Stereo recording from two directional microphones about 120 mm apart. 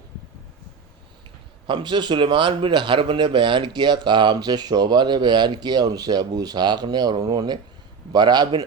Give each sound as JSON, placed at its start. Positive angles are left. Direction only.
{"t": 1.6, "sound": "a man's voice", "side_deg": -40}